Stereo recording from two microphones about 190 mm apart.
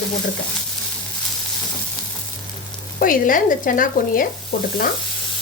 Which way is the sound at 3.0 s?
45° left (ahead or behind).